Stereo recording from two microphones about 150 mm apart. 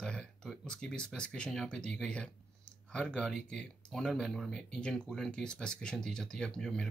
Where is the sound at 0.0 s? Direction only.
5° left (ahead or behind).